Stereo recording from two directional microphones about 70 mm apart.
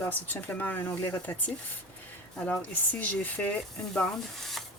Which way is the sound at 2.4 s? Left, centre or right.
Centre.